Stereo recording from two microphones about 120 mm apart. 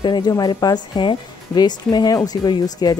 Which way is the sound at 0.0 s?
35° left (ahead or behind).